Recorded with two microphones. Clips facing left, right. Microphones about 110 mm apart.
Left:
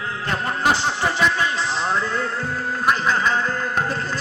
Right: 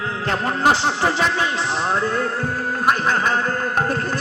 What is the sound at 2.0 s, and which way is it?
Speech, 50° right (ahead or behind).